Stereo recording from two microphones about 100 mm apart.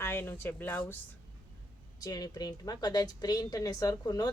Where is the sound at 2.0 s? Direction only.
40° left (ahead or behind).